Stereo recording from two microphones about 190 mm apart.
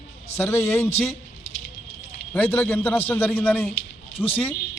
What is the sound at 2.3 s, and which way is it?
A man's voice, 10° left (ahead or behind).